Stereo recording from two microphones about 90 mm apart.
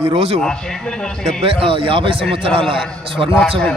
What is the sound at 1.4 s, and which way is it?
Speech, 80° right.